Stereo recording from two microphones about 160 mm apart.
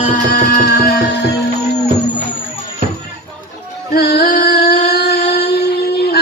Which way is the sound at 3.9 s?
75° left (ahead or behind).